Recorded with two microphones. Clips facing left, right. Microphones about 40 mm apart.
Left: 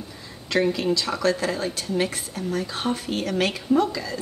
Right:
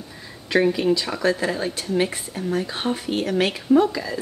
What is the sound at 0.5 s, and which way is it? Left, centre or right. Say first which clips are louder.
Speech: right 3 dB; centre.